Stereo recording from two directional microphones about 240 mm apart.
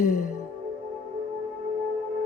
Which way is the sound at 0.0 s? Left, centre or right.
Left.